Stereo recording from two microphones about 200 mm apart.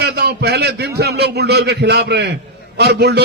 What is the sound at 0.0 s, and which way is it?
A man's voice, 55° right (ahead or behind).